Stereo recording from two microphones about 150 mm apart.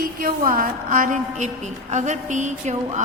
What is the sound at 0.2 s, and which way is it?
A woman's voice, 70° right (ahead or behind).